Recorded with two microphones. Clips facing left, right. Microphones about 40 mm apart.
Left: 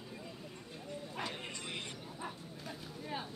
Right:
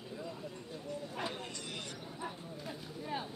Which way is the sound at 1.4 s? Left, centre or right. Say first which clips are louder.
Left 1 dB; left.